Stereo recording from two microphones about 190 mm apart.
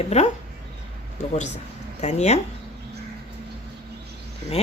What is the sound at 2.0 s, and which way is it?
Speech, 35° left (ahead or behind).